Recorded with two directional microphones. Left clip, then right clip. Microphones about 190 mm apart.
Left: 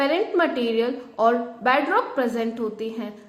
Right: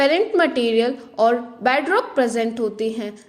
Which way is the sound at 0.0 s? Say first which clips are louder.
Right 4 dB; 40° right (ahead or behind).